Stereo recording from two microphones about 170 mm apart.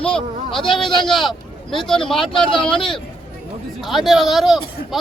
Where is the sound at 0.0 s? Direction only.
5° left (ahead or behind).